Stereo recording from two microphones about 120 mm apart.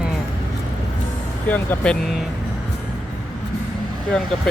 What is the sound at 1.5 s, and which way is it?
Speech, 15° left (ahead or behind).